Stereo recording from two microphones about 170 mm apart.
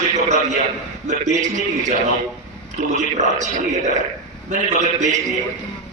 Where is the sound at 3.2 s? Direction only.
45° right (ahead or behind).